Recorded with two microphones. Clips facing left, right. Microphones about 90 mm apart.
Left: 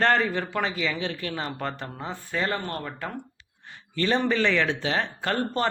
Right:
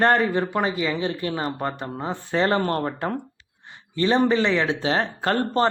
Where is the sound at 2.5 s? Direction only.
45° right (ahead or behind).